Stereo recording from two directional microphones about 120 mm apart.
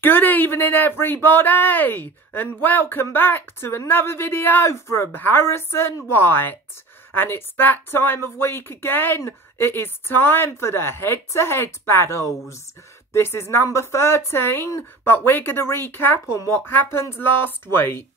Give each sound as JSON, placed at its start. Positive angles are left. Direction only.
{"t": 0.0, "sound": "speech", "side_deg": 15}